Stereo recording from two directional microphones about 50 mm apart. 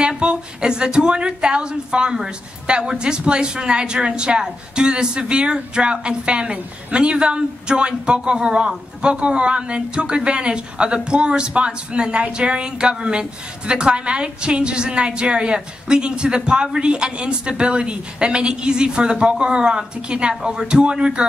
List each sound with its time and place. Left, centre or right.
0.2 s speech: centre